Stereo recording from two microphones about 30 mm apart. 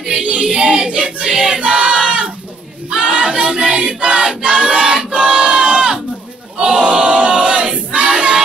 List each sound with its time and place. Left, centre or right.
0.1 s music: right
1.3 s music: centre
1.7 s battle cry: right
3.0 s a sound: right
3.8 s music: right
4.4 s a sound: right
6.8 s a capella: right
7.9 s music: right